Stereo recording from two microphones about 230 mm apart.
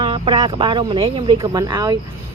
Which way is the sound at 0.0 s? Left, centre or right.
Right.